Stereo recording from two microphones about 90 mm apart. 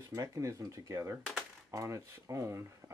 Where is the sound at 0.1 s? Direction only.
40° right (ahead or behind).